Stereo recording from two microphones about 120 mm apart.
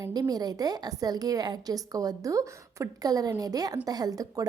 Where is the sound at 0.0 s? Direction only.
30° right (ahead or behind).